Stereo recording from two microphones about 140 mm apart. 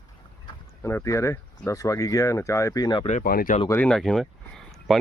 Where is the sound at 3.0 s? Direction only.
60° left (ahead or behind); by 3.6 s 85° left.